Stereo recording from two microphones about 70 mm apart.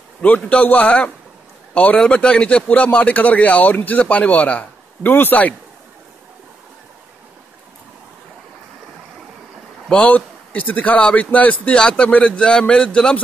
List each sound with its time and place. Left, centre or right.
0.5 s a man's voice: left
9.8 s a man's voice: centre